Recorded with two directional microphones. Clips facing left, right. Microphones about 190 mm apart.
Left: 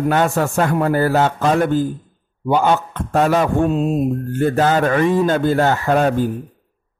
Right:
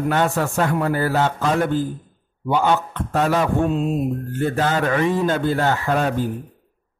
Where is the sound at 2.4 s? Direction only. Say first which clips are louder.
Left 3 dB; 45° left (ahead or behind).